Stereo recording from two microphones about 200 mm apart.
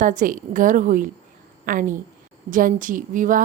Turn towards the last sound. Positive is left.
turn(degrees=-40)  # may be behind; listen again after turning